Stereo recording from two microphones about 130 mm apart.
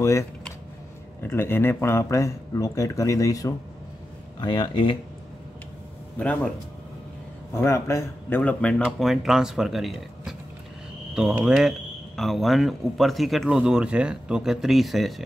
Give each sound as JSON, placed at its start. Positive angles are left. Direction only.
{"t": 0.0, "sound": "speech", "side_deg": 25}
{"t": 6.1, "sound": "speech", "side_deg": 10}
{"t": 7.5, "sound": "speech", "side_deg": 20}
{"t": 8.4, "sound": "speech", "side_deg": 10}
{"t": 8.8, "sound": "speech", "side_deg": -5}